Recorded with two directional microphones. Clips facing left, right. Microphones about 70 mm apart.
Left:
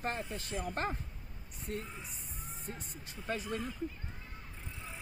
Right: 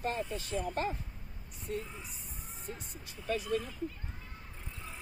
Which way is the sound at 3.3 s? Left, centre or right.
Left.